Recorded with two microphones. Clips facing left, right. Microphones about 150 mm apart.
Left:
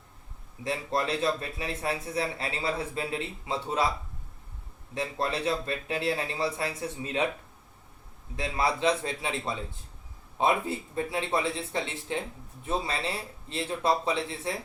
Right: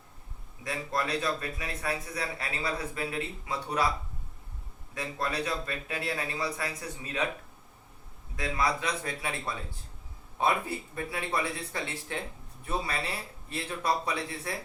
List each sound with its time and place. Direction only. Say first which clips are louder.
0.6 s a man's voice: left 3 dB; 25° left (ahead or behind)
4.9 s a man's voice: left 2 dB; 25° left (ahead or behind)
8.4 s a man's voice: left 2 dB; 25° left (ahead or behind)